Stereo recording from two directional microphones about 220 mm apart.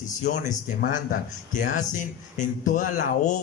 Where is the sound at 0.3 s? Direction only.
35° left (ahead or behind).